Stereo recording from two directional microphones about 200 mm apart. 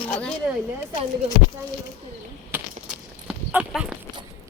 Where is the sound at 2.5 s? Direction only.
5° right (ahead or behind).